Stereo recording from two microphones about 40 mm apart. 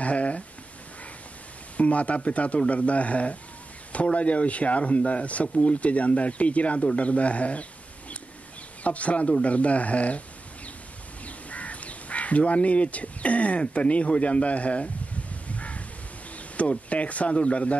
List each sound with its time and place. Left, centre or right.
0.0 s a sound: left
1.8 s speech: left
8.8 s speech: left
11.2 s crow: left
16.5 s speech: left